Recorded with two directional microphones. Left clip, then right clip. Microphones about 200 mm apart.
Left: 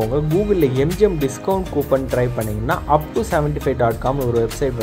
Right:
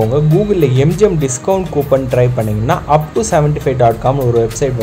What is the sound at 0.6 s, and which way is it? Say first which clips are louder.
Speech: right 5 dB; 20° left (ahead or behind).